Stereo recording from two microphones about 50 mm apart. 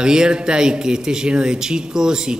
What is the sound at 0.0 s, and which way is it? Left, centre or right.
Speech, centre.